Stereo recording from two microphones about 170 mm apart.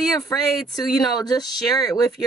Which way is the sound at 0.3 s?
20° left (ahead or behind).